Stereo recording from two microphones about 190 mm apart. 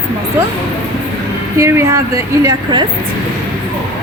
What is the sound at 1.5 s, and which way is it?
A woman's voice, 15° right (ahead or behind).